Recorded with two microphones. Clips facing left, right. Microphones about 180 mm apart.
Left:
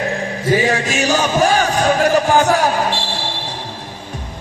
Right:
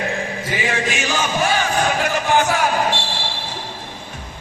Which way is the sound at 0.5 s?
40° left (ahead or behind).